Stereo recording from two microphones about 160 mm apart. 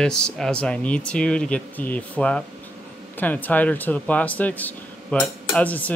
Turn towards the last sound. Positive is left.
turn(degrees=10)  # may be behind; listen again after turning